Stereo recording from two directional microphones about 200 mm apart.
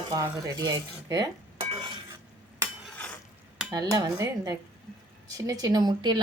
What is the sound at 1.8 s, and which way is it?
Stir, 25° right (ahead or behind).